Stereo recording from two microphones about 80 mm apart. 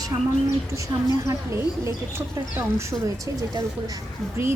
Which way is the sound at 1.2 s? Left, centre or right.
Right.